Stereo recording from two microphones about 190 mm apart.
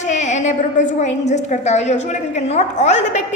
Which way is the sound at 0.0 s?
40° left (ahead or behind).